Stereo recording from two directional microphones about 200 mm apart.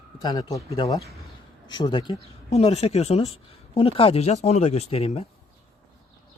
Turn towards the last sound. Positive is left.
turn(degrees=30)  # may be behind; listen again after turning